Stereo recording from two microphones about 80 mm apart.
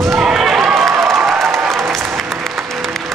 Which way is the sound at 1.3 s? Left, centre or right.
Centre.